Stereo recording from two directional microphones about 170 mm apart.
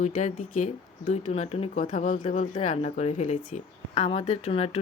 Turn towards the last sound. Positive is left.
turn(degrees=35)  # may be behind; listen again after turning